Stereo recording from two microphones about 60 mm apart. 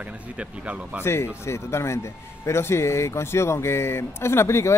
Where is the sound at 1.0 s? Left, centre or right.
Left.